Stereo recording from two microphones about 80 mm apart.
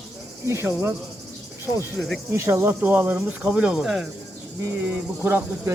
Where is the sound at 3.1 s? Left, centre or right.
Centre.